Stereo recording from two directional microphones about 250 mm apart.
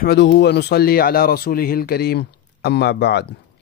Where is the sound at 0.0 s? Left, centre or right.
Left.